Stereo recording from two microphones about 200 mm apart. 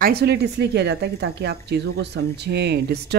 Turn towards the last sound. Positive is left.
turn(degrees=-55)  # may be behind; listen again after turning